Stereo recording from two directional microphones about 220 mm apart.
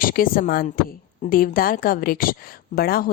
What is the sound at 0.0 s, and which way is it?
A woman's voice, 40° left (ahead or behind).